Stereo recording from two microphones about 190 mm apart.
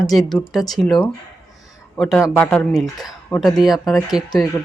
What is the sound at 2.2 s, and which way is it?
Speech, 15° left (ahead or behind).